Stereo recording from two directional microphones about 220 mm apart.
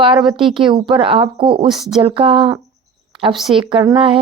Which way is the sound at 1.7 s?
Centre (ahead or behind).